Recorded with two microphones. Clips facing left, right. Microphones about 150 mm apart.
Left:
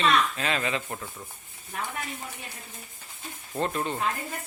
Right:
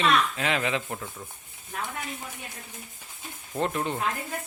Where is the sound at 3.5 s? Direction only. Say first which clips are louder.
Right 1 dB; 15° right (ahead or behind).